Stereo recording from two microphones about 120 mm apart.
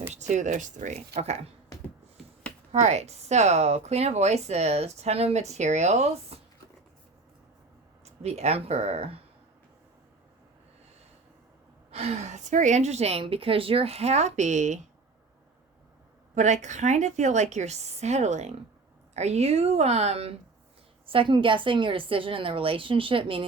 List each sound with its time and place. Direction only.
0.1 s speech: 85° right; by 1.4 s 60° right (ahead or behind)
2.2 s a sound: centre (ahead or behind)
2.7 s a woman's voice: 70° right (ahead or behind)
8.0 s speech: 65° right (ahead or behind)
11.9 s a woman's voice: 60° right (ahead or behind); by 14.8 s 80° right
16.3 s a woman's voice: 85° right; by 20.3 s 60° right (ahead or behind)
21.1 s a woman's voice: 45° right (ahead or behind)